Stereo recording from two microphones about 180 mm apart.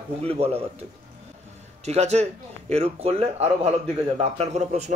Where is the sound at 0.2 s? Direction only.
35° right (ahead or behind).